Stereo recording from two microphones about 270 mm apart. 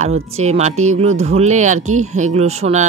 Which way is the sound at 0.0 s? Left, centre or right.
Right.